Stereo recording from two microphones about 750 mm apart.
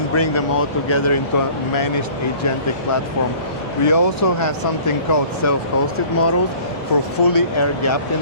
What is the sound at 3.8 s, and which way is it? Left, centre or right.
Speech, left.